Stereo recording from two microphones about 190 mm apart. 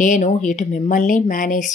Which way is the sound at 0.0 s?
40° left (ahead or behind).